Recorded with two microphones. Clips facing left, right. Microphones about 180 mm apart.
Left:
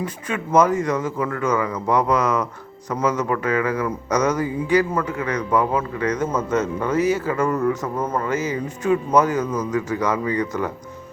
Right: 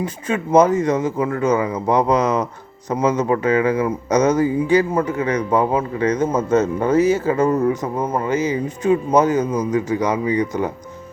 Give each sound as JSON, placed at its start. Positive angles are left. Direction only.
{"t": 0.0, "sound": "speech", "side_deg": -25}